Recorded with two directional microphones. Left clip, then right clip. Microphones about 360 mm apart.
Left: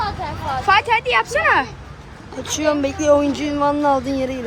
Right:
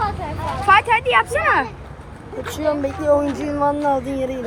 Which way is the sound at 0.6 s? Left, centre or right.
Centre.